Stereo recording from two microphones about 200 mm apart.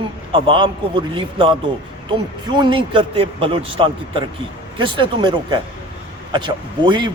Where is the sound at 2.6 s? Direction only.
25° right (ahead or behind).